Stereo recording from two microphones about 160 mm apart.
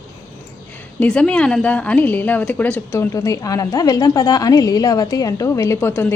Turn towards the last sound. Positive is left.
turn(degrees=15)  # may be behind; listen again after turning